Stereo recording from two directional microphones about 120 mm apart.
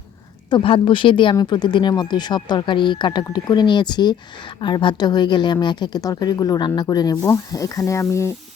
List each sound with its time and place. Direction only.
0.5 s speech: 45° left (ahead or behind); by 8.3 s 25° left (ahead or behind)